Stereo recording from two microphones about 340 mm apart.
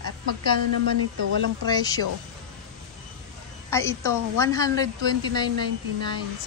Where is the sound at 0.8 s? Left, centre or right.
Right.